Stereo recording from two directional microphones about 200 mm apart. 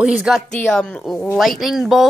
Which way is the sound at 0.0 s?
5° right (ahead or behind).